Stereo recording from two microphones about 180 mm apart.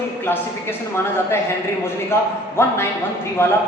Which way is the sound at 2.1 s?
10° left (ahead or behind).